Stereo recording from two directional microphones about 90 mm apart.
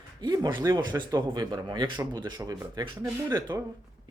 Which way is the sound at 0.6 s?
50° right (ahead or behind).